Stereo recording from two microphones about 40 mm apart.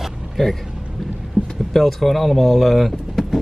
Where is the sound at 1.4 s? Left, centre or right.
Right.